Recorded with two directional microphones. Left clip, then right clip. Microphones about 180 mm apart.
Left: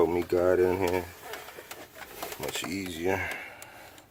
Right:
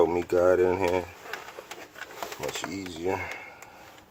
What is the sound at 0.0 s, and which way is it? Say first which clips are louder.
Speech: right 3 dB; 20° left (ahead or behind).